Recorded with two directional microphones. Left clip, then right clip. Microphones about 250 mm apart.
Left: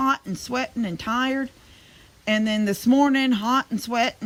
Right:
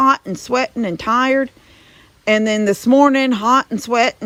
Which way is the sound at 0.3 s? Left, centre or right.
Right.